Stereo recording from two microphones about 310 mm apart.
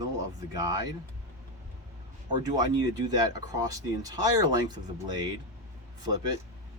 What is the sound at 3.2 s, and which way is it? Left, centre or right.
Speech, centre.